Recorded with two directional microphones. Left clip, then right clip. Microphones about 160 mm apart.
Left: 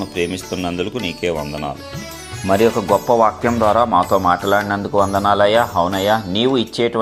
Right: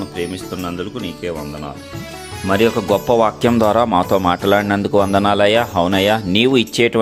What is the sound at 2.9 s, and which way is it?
Speech, 45° right (ahead or behind).